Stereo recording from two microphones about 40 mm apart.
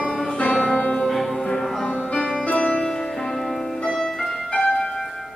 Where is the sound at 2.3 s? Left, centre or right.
Left.